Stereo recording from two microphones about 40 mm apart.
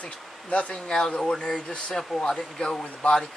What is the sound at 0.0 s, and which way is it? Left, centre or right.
Speech, left.